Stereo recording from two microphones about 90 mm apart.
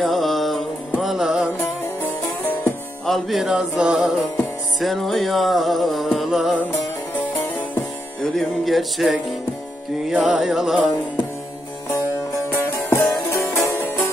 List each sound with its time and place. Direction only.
0.0 s music: centre (ahead or behind)
2.0 s music: 20° left (ahead or behind)
3.1 s music: centre (ahead or behind)
8.2 s music: centre (ahead or behind)
12.6 s music: 30° left (ahead or behind)